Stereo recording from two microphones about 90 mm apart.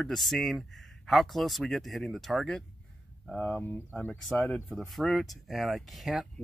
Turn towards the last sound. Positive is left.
turn(degrees=0)  # may be behind; listen again after turning